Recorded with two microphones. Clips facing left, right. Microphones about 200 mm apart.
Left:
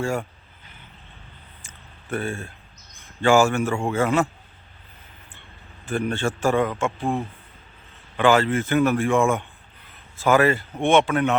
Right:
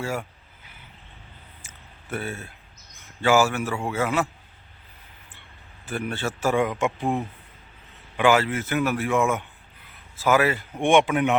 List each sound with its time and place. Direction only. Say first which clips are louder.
0.0 s vehicle: left 4 dB; 5° right (ahead or behind)
1.6 s a sound: left 4 dB; 5° right (ahead or behind)
3.2 s a man's voice: left 3 dB; 5° right (ahead or behind)
5.9 s a man's voice: left 4 dB; 5° right (ahead or behind)